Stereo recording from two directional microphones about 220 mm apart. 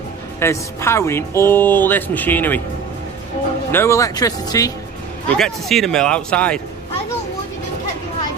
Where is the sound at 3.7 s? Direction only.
10° left (ahead or behind).